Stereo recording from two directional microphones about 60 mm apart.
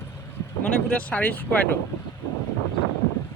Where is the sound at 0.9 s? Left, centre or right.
Left.